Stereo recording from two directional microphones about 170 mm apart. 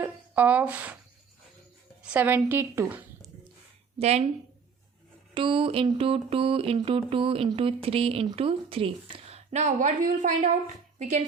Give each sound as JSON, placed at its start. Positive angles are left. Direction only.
{"t": 0.0, "sound": "speech", "side_deg": -10}
{"t": 2.1, "sound": "a woman's voice", "side_deg": -10}
{"t": 3.9, "sound": "a woman's voice", "side_deg": -40}
{"t": 5.3, "sound": "a sound", "side_deg": -30}